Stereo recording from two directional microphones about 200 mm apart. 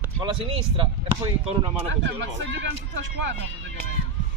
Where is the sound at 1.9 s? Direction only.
65° right (ahead or behind).